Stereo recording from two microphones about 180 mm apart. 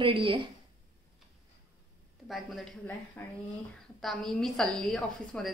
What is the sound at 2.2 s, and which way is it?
A woman's voice, centre (ahead or behind).